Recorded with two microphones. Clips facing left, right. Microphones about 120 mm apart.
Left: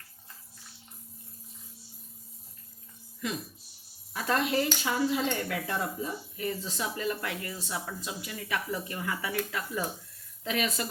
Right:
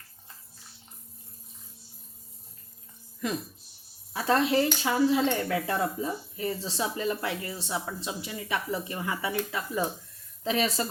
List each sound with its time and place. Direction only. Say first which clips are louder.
3.2 s speech: right 3 dB; 40° right (ahead or behind)
4.1 s cutlery: right 4 dB; 30° right (ahead or behind)
10.4 s speech: right 4 dB; 30° right (ahead or behind)